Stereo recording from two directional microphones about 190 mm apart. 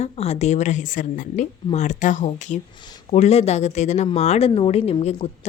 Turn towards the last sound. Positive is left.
turn(degrees=35)  # may be behind; listen again after turning